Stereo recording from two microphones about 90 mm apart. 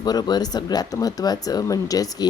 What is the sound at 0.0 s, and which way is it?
A woman's voice, 50° left (ahead or behind).